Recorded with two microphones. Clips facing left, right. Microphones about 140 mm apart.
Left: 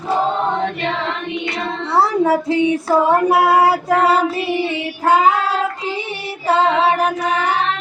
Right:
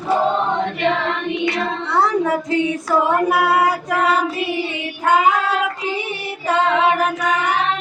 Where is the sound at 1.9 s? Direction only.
30° left (ahead or behind).